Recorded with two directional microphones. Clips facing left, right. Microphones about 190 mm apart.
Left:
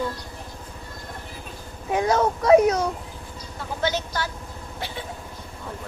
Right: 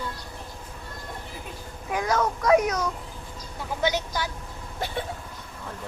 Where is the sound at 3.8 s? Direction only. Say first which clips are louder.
Even; 15° right (ahead or behind).